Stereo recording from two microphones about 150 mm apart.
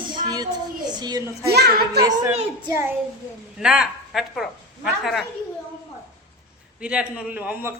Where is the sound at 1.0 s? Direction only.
30° right (ahead or behind).